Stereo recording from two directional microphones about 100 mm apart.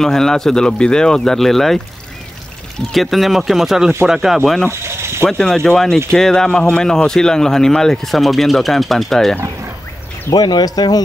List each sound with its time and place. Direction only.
0.0 s speech: 5° left (ahead or behind)
2.9 s speech: centre (ahead or behind)
4.6 s mechanisms: 25° right (ahead or behind)
5.2 s speech: 5° left (ahead or behind)
10.3 s speech: 40° left (ahead or behind)